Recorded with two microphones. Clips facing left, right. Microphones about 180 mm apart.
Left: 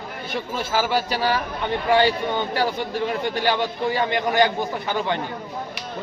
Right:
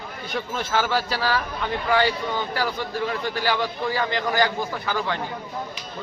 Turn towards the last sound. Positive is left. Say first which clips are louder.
# left 2 dB
turn(degrees=20)  # may be behind; listen again after turning